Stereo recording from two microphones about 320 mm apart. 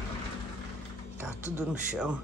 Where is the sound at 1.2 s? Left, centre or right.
Centre.